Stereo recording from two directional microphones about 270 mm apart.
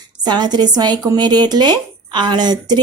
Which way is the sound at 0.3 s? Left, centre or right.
Centre.